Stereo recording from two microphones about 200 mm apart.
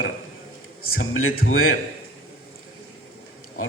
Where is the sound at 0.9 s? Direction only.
90° left.